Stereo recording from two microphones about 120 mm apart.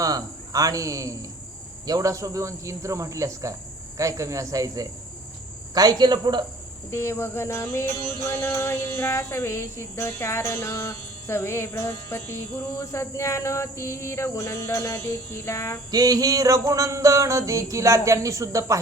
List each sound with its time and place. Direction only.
0.0 s music: 30° right (ahead or behind)
5.7 s speech: 35° right (ahead or behind)
6.9 s music: 20° left (ahead or behind)
15.9 s music: 30° right (ahead or behind)